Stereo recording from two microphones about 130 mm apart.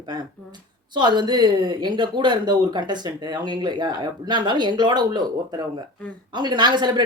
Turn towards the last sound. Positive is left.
turn(degrees=-35)  # may be behind; listen again after turning